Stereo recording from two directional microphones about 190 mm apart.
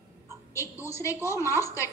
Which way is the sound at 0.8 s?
15° left (ahead or behind).